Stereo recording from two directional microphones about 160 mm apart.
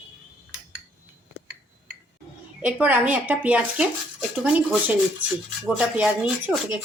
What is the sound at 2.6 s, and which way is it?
Speech, 10° right (ahead or behind).